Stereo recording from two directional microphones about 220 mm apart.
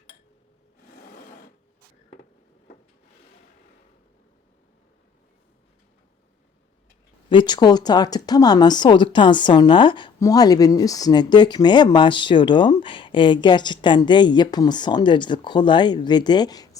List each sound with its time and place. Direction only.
7.3 s a woman's voice: 20° left (ahead or behind)